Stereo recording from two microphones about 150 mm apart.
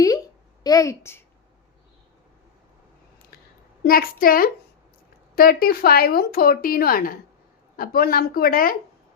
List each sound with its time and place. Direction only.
0.6 s a woman's voice: 25° left (ahead or behind)
3.8 s a woman's voice: 75° left (ahead or behind)